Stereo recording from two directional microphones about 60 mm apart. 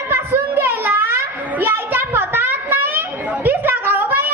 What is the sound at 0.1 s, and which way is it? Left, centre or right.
Children playing, right.